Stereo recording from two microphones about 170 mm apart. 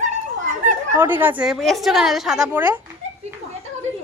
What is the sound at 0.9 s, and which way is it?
A woman's voice, 10° right (ahead or behind).